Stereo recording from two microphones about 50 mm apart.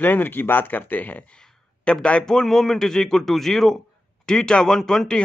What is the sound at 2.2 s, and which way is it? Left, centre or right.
A man's voice, centre.